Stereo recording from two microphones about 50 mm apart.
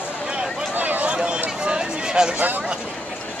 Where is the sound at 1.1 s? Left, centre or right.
Centre.